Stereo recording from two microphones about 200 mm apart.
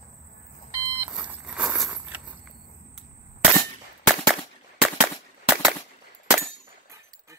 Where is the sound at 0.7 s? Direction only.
15° right (ahead or behind).